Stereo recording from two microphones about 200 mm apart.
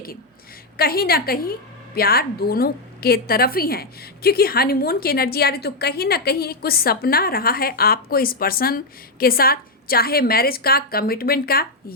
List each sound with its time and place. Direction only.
0.8 s a woman's voice: 50° left (ahead or behind)